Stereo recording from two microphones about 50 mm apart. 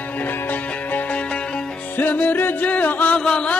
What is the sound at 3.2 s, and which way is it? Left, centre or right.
Music, centre.